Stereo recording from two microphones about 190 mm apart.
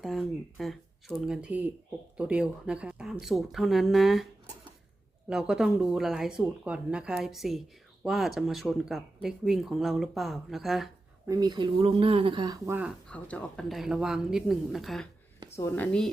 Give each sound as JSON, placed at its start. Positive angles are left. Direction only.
{"t": 0.0, "sound": "speech", "side_deg": 0}
{"t": 5.3, "sound": "speech", "side_deg": -5}
{"t": 11.3, "sound": "speech", "side_deg": -20}
{"t": 13.1, "sound": "speech", "side_deg": 5}
{"t": 15.5, "sound": "speech", "side_deg": 10}